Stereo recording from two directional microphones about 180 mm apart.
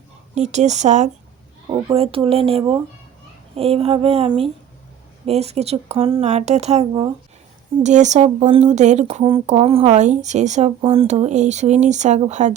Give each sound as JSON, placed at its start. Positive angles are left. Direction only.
{"t": 0.3, "sound": "speech", "side_deg": -40}
{"t": 1.7, "sound": "speech", "side_deg": -30}